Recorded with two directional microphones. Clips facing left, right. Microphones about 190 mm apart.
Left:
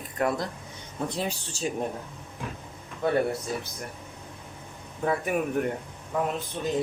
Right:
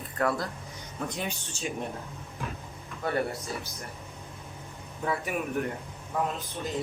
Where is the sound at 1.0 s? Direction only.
35° left (ahead or behind).